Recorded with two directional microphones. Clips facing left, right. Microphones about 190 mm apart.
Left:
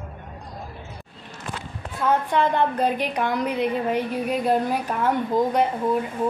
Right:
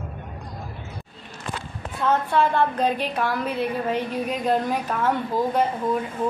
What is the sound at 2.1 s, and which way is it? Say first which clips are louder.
A woman's voice: even; 15° left (ahead or behind).